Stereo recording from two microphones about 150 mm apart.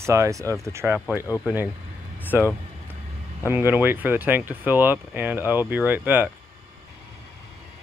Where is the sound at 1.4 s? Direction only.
5° right (ahead or behind).